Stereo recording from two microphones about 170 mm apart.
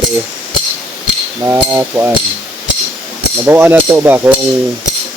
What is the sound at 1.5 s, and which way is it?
Speech, 15° right (ahead or behind).